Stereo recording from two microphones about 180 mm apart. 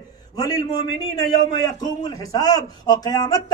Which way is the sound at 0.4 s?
20° left (ahead or behind).